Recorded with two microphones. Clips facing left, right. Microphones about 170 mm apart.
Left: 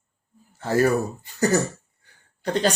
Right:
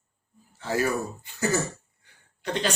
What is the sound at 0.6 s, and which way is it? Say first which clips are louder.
Speech: left 6 dB; 45° left (ahead or behind).